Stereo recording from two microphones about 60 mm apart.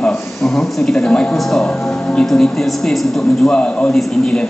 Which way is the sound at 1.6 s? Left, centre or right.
Centre.